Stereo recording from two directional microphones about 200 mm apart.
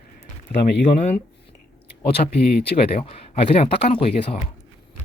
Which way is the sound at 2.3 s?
50° left (ahead or behind).